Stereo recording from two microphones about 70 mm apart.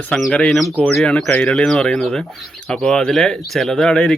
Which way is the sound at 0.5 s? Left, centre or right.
Centre.